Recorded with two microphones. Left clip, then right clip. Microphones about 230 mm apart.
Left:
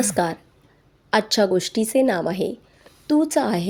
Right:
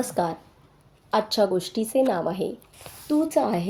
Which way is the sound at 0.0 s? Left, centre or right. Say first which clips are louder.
Left 4 dB; left.